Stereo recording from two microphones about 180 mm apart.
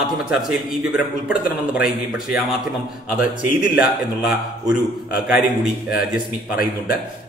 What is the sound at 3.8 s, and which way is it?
A man's voice, 5° right (ahead or behind).